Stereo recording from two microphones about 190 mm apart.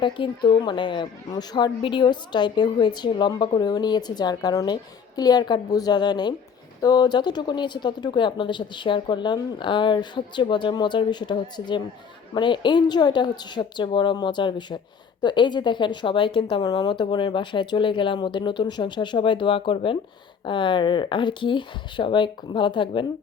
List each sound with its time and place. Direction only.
0.0 s a woman's voice: 25° left (ahead or behind)